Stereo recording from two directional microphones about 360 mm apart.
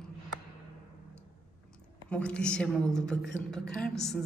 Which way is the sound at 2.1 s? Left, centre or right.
Centre.